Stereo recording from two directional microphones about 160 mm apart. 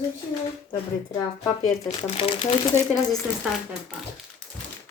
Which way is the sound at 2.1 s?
35° left (ahead or behind).